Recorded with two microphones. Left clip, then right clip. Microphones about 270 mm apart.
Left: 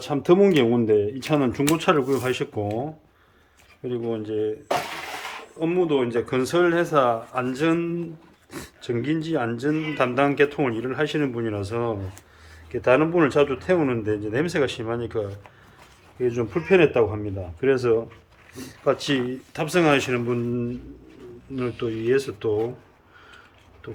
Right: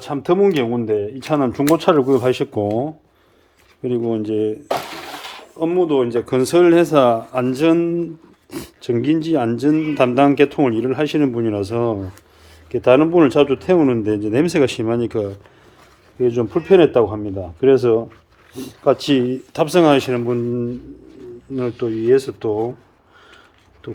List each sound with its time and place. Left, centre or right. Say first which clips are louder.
0.0 s speech: right 2 dB; centre; by 2.6 s right
3.8 s speech: right 7 dB; right
23.8 s speech: right 6 dB; right